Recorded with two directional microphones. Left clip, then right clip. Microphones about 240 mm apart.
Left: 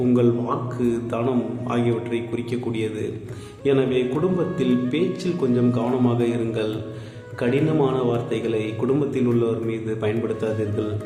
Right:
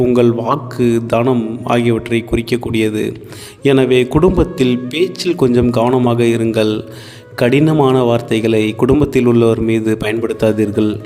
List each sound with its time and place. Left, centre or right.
0.1 s a man's voice: right